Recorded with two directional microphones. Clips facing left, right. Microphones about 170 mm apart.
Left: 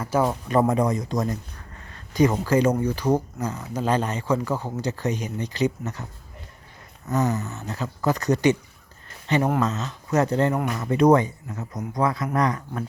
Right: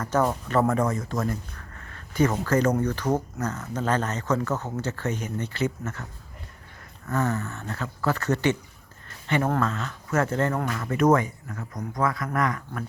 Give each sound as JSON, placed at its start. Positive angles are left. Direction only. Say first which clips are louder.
{"t": 0.0, "sound": "speech", "louder": "left 1 dB", "side_deg": 10}
{"t": 7.1, "sound": "speech", "louder": "left 2 dB", "side_deg": 15}